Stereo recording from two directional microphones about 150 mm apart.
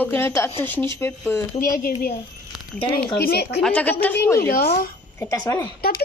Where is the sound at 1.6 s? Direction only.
80° left.